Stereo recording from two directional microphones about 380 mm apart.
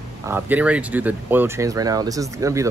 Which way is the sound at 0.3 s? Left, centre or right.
Centre.